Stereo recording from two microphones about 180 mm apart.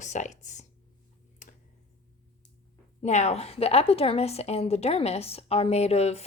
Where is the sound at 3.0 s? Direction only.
40° left (ahead or behind).